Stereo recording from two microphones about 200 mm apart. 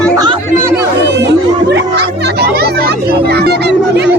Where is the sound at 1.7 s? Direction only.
55° right (ahead or behind).